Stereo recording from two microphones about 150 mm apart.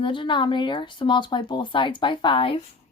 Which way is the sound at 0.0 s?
35° left (ahead or behind).